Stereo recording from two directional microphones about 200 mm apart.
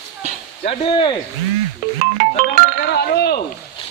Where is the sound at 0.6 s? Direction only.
25° left (ahead or behind).